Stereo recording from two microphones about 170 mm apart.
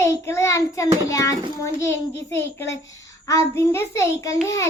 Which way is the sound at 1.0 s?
20° left (ahead or behind).